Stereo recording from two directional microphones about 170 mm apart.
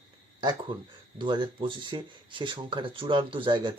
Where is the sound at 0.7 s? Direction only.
30° right (ahead or behind).